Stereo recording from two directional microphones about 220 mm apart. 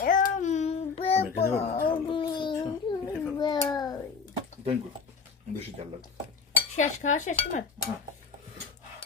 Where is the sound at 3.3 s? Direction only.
20° left (ahead or behind).